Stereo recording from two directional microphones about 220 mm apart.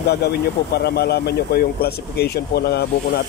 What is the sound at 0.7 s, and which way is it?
Speech, 45° left (ahead or behind).